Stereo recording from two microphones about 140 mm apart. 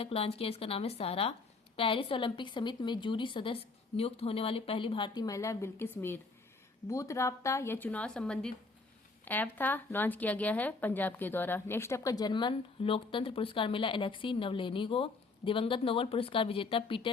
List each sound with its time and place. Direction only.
0.0 s a woman's voice: 45° left (ahead or behind)